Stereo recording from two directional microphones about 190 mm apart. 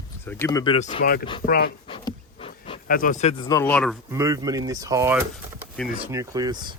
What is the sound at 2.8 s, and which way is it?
Speech, 45° left (ahead or behind).